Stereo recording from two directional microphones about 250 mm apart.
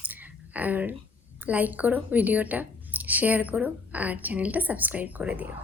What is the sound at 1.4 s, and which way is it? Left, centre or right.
Speech, centre.